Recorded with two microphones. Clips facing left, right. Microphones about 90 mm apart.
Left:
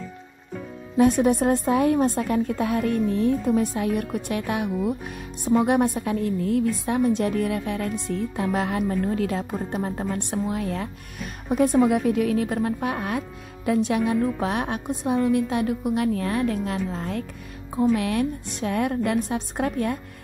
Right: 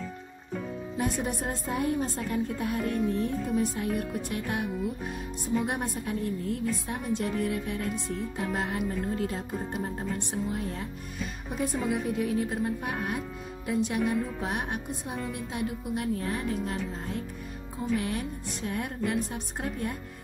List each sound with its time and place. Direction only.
0.9 s a woman's voice: 75° left (ahead or behind)
11.4 s a woman's voice: 70° left (ahead or behind); by 20.0 s 90° left